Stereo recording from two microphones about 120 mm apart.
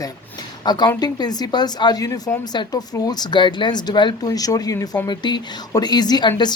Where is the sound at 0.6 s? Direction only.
35° left (ahead or behind).